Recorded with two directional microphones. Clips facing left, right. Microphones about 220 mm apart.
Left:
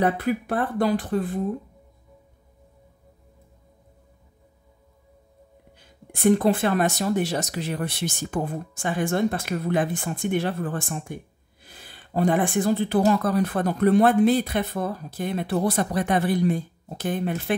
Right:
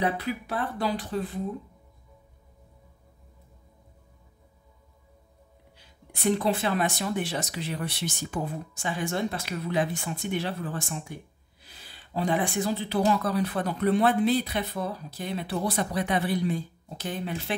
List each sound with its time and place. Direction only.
0.0 s speech: 50° left (ahead or behind)
6.1 s speech: 50° left (ahead or behind)